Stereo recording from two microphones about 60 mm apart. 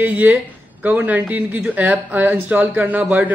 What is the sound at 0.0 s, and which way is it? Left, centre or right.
A man's voice, right.